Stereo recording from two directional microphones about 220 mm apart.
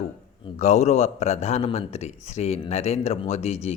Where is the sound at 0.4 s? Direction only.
30° left (ahead or behind).